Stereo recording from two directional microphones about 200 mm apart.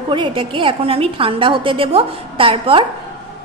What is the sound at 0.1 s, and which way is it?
A woman's voice, 25° right (ahead or behind).